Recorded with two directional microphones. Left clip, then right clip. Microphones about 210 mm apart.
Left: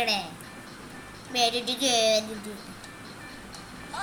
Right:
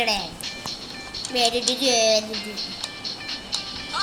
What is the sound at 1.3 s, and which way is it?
Speech, 10° left (ahead or behind).